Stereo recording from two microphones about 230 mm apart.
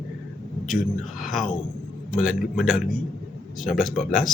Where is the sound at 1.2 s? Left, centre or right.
Centre.